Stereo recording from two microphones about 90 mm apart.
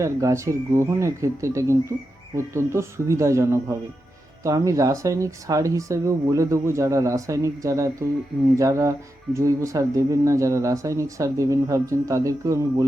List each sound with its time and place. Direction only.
0.0 s speech: 35° right (ahead or behind)